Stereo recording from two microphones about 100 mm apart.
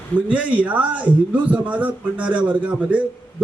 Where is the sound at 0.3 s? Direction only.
15° right (ahead or behind).